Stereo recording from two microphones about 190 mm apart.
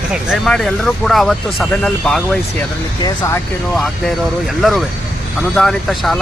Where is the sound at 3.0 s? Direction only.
15° left (ahead or behind).